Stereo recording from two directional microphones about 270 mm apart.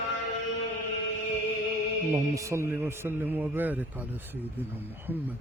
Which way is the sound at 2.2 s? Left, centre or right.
Centre.